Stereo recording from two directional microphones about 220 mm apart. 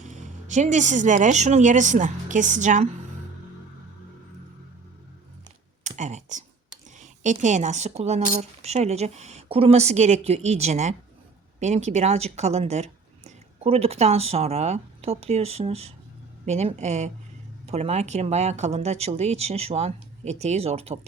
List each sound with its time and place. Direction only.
0.0 s speech: 35° right (ahead or behind)
5.8 s a sound: 35° right (ahead or behind)
7.0 s speech: 35° right (ahead or behind)